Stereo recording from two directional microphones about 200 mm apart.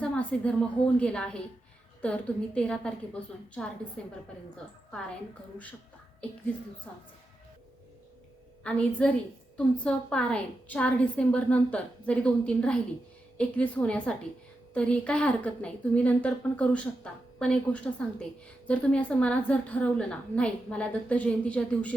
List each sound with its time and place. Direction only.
0.0 s a sound: 5° left (ahead or behind)
0.9 s a woman's voice: 5° left (ahead or behind)
6.9 s a woman's voice: 5° left (ahead or behind)
8.6 s a woman's voice: 5° left (ahead or behind)